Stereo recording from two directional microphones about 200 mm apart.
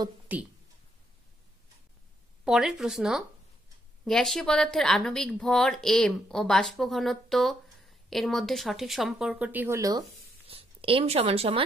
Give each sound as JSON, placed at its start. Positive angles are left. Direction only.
{"t": 0.3, "sound": "speech", "side_deg": -10}
{"t": 2.4, "sound": "speech", "side_deg": 0}
{"t": 10.4, "sound": "speech", "side_deg": -30}